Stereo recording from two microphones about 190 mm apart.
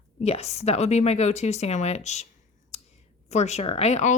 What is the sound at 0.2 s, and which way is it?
Speech, 35° left (ahead or behind).